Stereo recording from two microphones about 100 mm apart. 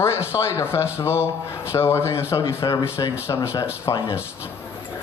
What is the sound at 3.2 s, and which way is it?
Speech, 30° left (ahead or behind).